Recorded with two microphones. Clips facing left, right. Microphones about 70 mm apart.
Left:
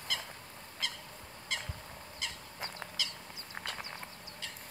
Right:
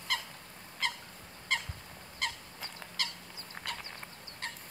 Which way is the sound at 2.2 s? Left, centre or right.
Right.